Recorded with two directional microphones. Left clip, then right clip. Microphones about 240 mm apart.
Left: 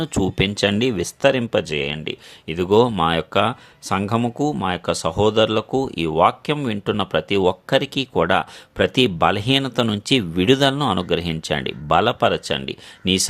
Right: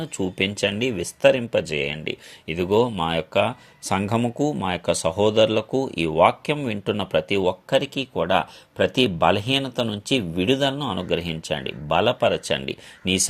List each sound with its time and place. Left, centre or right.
0.0 s speech: left